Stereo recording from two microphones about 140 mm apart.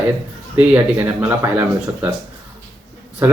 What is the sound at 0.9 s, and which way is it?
Speech, 15° right (ahead or behind).